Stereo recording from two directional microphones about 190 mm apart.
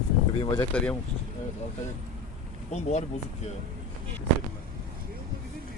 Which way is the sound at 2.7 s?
35° left (ahead or behind).